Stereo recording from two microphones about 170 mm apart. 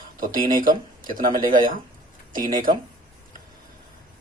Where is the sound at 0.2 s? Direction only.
55° right (ahead or behind).